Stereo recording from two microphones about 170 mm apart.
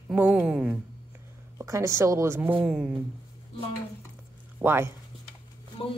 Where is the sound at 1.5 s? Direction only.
15° right (ahead or behind).